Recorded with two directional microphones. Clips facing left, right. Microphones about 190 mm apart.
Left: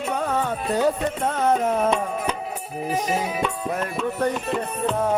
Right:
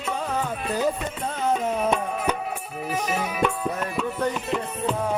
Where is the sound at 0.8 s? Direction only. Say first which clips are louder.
Left 5 dB; 65° left (ahead or behind).